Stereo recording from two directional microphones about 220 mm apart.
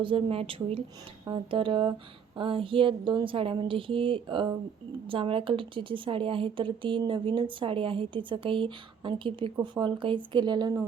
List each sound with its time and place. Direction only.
0.0 s a woman's voice: 25° right (ahead or behind)